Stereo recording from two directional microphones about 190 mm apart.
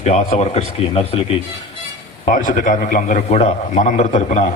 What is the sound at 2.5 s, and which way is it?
A man's voice, 45° left (ahead or behind).